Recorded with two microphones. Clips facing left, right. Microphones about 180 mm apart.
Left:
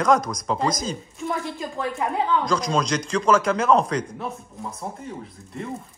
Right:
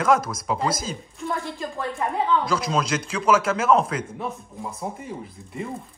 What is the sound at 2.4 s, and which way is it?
Speech, 5° right (ahead or behind).